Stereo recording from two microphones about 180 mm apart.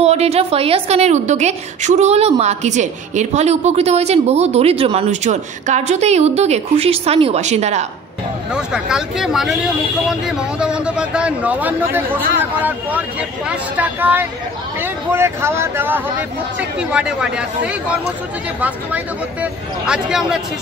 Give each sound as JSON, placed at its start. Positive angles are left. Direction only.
{"t": 0.0, "sound": "a woman's voice", "side_deg": -35}
{"t": 8.5, "sound": "speech", "side_deg": -5}
{"t": 10.6, "sound": "speech", "side_deg": -5}
{"t": 19.4, "sound": "speech", "side_deg": -5}